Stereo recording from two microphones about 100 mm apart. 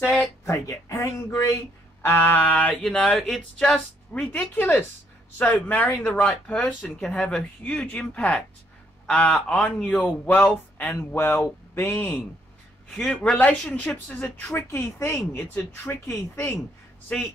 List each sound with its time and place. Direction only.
0.0 s speech: 15° left (ahead or behind)
0.5 s speech: 30° left (ahead or behind); by 4.3 s 5° left (ahead or behind)
4.3 s speech: 15° left (ahead or behind)
17.1 s speech: 15° left (ahead or behind)